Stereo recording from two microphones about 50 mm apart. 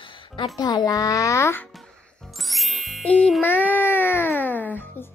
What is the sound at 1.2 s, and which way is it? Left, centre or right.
Speech, left.